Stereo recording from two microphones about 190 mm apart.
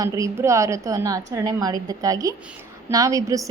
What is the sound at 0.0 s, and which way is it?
A woman's voice, 15° right (ahead or behind).